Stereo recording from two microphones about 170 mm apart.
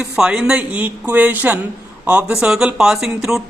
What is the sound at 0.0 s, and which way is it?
A woman's voice, 5° right (ahead or behind).